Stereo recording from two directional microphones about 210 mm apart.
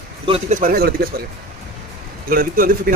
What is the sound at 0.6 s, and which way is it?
Speech, 45° right (ahead or behind).